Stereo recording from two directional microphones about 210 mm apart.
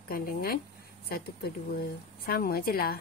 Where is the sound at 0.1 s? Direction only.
45° left (ahead or behind).